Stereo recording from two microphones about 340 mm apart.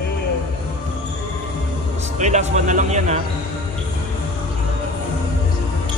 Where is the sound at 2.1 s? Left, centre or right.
Right.